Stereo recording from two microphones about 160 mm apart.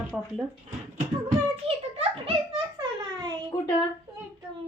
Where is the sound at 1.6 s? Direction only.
35° right (ahead or behind).